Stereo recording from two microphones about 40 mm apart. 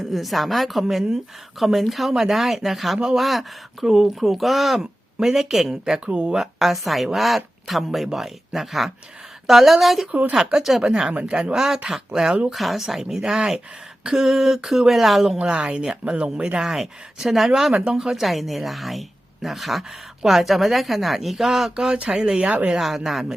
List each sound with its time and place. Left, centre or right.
0.0 s speech: centre
10.1 s speech: right
10.5 s speech: centre
10.8 s speech: right
11.5 s speech: centre
16.0 s speech: right
16.6 s speech: centre
17.7 s speech: centre
22.1 s speech: right
22.8 s speech: centre